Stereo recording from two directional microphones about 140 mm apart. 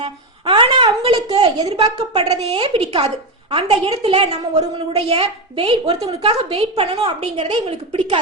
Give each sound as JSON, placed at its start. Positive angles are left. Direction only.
{"t": 0.0, "sound": "a woman's voice", "side_deg": -40}